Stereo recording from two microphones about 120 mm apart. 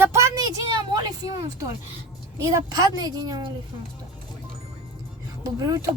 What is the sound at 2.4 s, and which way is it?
Speech, 25° right (ahead or behind).